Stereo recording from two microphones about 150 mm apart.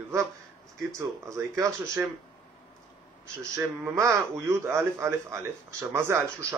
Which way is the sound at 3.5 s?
15° right (ahead or behind).